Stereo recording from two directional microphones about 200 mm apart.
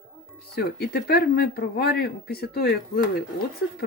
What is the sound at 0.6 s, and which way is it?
Speech, 50° left (ahead or behind).